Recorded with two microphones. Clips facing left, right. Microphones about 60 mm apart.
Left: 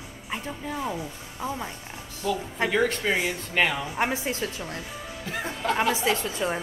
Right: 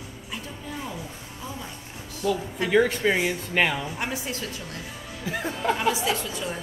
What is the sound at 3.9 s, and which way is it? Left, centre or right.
Speech, left.